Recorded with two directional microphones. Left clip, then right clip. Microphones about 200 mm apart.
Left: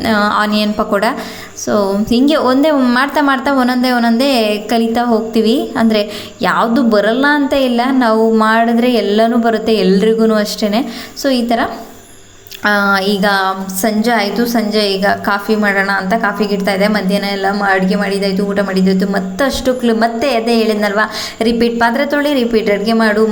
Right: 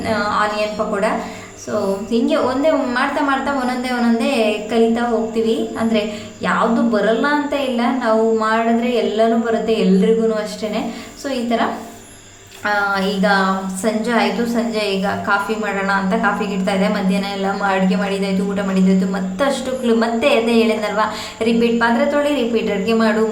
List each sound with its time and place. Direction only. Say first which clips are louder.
0.0 s a woman's voice: left 5 dB; 45° left (ahead or behind)
1.7 s a woman's voice: left 5 dB; 40° left (ahead or behind)
12.6 s a woman's voice: left 5 dB; 40° left (ahead or behind)